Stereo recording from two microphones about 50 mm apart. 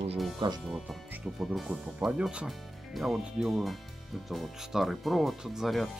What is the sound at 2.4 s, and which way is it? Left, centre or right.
Speech, centre.